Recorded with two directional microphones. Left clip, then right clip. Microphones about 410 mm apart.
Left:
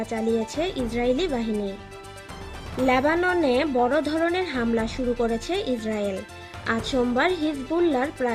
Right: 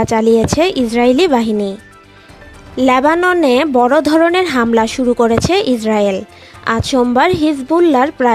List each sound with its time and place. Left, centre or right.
0.0 s a woman's voice: right
2.8 s a woman's voice: right